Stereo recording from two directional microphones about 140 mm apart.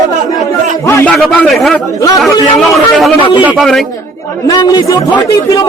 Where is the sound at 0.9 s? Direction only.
15° left (ahead or behind).